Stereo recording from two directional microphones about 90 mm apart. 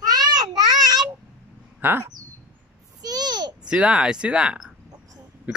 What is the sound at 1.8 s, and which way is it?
Bird, 25° right (ahead or behind).